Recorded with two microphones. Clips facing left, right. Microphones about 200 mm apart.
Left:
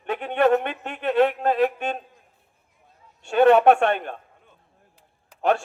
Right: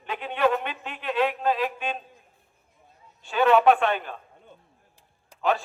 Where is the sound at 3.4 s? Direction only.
65° left (ahead or behind).